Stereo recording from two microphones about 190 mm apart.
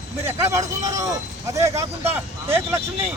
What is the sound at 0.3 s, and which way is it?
Speech, 15° right (ahead or behind).